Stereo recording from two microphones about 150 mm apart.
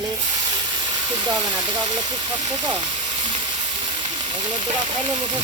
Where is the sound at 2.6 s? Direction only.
30° right (ahead or behind).